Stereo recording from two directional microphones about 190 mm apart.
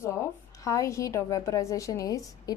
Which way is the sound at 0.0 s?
15° left (ahead or behind).